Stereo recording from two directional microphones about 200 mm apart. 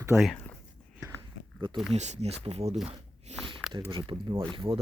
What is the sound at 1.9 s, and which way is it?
Speech, 35° right (ahead or behind).